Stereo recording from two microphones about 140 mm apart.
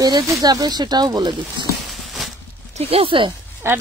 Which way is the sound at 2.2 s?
Centre (ahead or behind).